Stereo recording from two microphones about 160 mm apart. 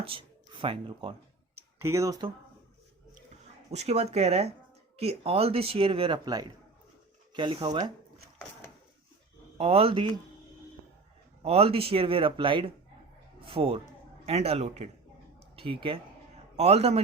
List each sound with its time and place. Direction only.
0.0 s speech: 35° right (ahead or behind)
1.8 s speech: 15° right (ahead or behind)
3.7 s speech: 40° right (ahead or behind)
9.6 s speech: 40° right (ahead or behind)
11.4 s speech: 40° right (ahead or behind)
15.4 s a sound: 35° right (ahead or behind)
16.6 s speech: 40° right (ahead or behind)